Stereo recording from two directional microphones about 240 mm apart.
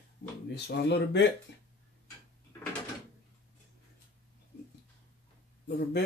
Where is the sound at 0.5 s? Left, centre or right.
Left.